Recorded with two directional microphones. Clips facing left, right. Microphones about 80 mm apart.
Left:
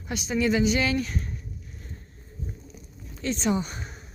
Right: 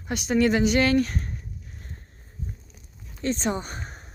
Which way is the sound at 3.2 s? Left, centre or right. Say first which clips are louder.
Even; right.